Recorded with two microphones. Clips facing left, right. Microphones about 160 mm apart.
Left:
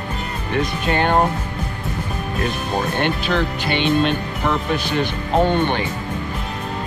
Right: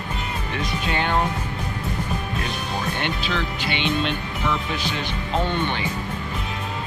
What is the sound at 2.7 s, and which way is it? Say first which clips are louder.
Speech: left 6 dB; 55° left (ahead or behind).